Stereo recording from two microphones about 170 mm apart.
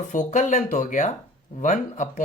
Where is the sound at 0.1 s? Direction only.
45° left (ahead or behind).